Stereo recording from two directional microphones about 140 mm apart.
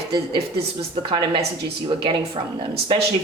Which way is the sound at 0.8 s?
40° right (ahead or behind).